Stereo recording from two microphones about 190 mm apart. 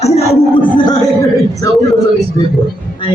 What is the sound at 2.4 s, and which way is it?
Speech, 20° left (ahead or behind).